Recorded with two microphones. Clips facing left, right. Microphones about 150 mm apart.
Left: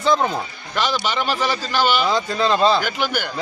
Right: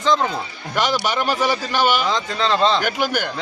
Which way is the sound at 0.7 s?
15° right (ahead or behind).